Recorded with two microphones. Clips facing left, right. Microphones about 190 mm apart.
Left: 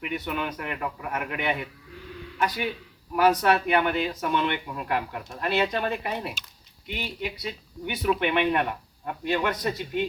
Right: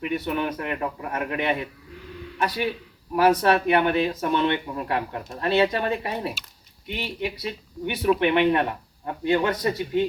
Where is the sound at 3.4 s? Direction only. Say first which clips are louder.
Right 3 dB; 25° right (ahead or behind).